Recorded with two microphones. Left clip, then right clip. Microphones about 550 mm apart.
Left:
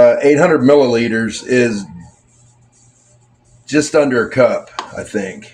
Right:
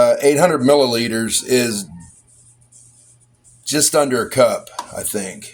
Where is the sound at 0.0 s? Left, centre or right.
Right.